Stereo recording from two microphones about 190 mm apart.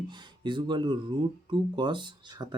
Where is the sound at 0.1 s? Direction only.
25° right (ahead or behind).